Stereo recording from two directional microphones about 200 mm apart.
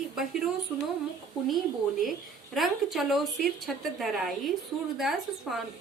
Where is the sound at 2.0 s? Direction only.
Centre (ahead or behind).